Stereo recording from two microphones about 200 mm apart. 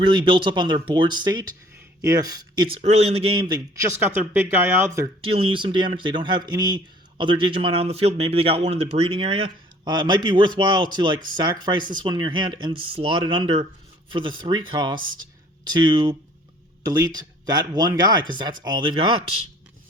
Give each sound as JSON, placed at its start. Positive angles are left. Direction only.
{"t": 0.0, "sound": "speech", "side_deg": -25}
{"t": 2.8, "sound": "speech", "side_deg": -30}
{"t": 5.3, "sound": "speech", "side_deg": -25}